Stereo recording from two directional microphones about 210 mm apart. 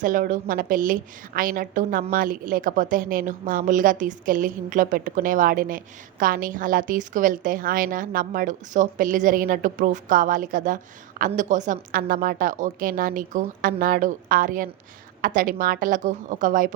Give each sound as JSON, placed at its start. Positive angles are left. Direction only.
{"t": 0.0, "sound": "a woman's voice", "side_deg": -40}